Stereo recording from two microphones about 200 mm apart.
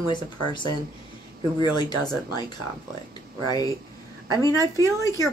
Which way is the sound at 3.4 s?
20° left (ahead or behind).